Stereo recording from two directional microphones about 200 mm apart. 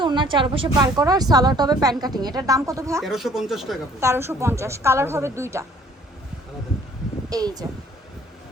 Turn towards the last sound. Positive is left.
turn(degrees=-20)  # may be behind; listen again after turning